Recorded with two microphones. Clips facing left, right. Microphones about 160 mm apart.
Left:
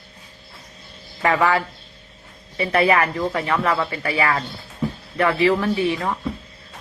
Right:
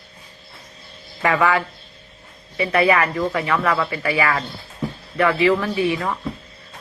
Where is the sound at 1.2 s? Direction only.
30° left (ahead or behind).